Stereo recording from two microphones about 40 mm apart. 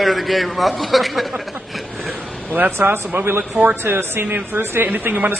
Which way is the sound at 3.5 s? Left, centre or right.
Right.